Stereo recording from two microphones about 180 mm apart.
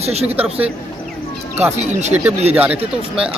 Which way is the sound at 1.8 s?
40° right (ahead or behind).